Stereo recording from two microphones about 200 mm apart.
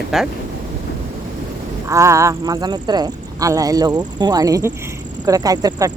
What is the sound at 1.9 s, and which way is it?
Speech, 15° right (ahead or behind).